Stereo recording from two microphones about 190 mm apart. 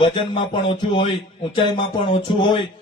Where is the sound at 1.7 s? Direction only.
25° left (ahead or behind).